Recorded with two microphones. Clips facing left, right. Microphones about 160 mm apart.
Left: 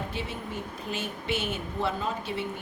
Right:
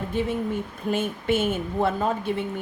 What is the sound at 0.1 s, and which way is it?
A woman's voice, 50° right (ahead or behind).